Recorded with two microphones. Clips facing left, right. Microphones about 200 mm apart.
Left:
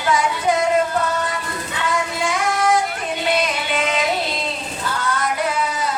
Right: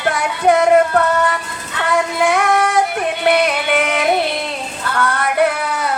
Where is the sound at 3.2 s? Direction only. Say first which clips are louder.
Right 6 dB; 65° right (ahead or behind).